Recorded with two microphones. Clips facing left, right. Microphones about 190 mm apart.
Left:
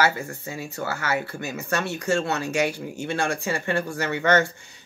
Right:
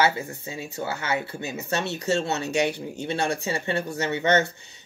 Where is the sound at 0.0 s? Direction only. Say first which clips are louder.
Even; 20° right (ahead or behind).